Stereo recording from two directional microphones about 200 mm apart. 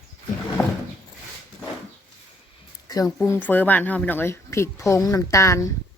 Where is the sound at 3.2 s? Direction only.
10° left (ahead or behind).